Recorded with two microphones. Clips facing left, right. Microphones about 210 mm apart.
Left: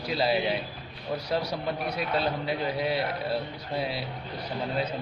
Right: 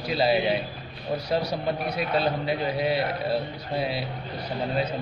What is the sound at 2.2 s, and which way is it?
Speech, 20° right (ahead or behind).